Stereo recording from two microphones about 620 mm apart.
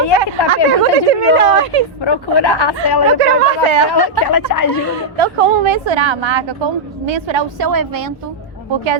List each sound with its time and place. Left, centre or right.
0.2 s speech: right
2.0 s speech: left
3.2 s a woman's voice: right
3.8 s speech: left
5.1 s a woman's voice: right